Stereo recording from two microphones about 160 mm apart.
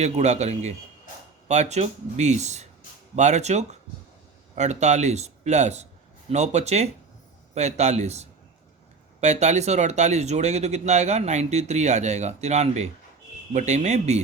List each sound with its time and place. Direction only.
0.0 s speech: 45° right (ahead or behind)